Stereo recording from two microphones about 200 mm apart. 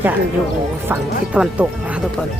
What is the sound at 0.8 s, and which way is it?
Speech, 5° right (ahead or behind).